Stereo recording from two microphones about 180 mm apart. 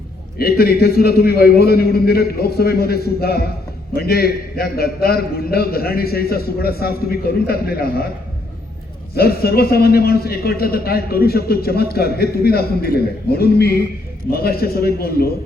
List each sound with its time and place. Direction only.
0.3 s a man's voice: 60° left (ahead or behind)
9.1 s a man's voice: 60° left (ahead or behind)